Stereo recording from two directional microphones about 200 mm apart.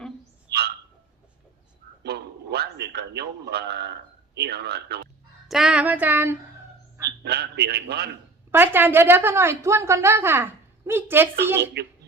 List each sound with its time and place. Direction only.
2.0 s a man's voice: 55° right (ahead or behind)
5.5 s a woman's voice: centre (ahead or behind)
7.3 s a man's voice: 55° right (ahead or behind)
8.4 s a woman's voice: 10° right (ahead or behind)